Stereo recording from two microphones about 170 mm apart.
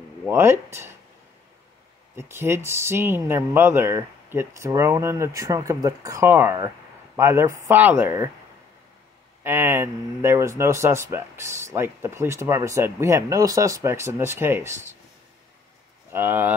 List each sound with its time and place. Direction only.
0.3 s speech: 15° right (ahead or behind)
2.1 s speech: 15° right (ahead or behind)
9.4 s speech: 15° right (ahead or behind)
16.1 s speech: 15° right (ahead or behind)